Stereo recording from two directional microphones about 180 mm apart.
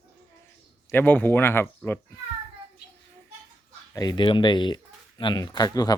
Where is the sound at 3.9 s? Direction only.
20° left (ahead or behind).